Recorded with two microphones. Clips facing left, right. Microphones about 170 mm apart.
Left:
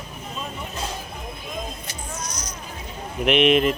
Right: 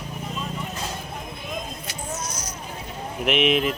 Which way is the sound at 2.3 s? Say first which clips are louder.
Right 1 dB; 5° right (ahead or behind).